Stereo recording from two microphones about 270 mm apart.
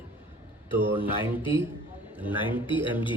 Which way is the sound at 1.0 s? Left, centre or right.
Centre.